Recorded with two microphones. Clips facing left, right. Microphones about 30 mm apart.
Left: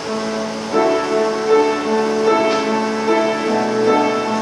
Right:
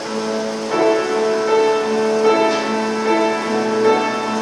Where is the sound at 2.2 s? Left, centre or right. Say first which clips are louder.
Right 1 dB; centre.